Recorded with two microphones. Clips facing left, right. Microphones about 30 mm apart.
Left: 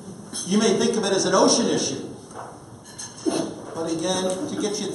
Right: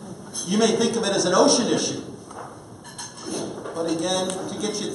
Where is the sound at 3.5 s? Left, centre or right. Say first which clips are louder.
Right 2 dB; centre.